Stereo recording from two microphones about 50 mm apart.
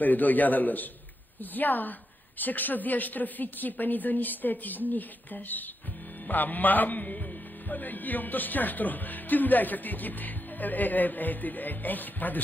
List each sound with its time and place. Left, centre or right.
0.0 s speech: left